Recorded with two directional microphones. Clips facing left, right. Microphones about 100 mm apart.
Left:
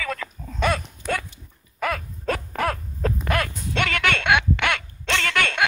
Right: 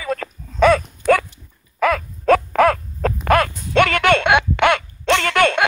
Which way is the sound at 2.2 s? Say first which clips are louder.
Right 11 dB; 90° right.